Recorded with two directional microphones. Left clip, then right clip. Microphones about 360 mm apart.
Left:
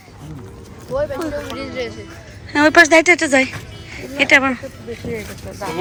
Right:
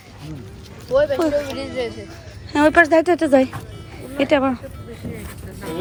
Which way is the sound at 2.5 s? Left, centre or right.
Centre.